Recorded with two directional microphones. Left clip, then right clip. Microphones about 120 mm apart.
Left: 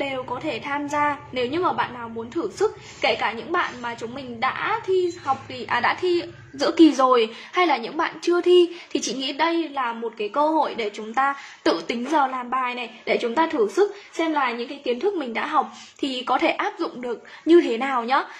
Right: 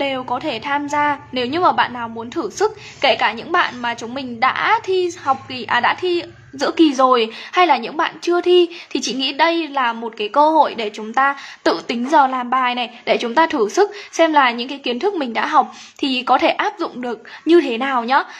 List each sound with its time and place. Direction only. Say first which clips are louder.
0.0 s a woman's voice: right 6 dB; 35° right (ahead or behind)
1.5 s a woman's voice: right 10 dB; 40° right (ahead or behind)
15.3 s a woman's voice: right 7 dB; 35° right (ahead or behind)